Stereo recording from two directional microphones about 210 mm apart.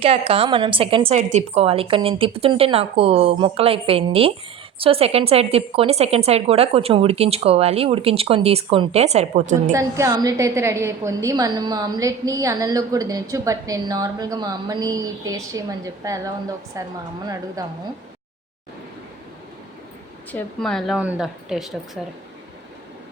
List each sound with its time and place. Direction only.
0.0 s speech: 25° right (ahead or behind)
9.7 s a woman's voice: 15° right (ahead or behind)
20.3 s a woman's voice: centre (ahead or behind)